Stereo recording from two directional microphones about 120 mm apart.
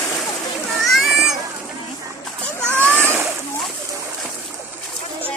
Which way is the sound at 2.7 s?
10° left (ahead or behind).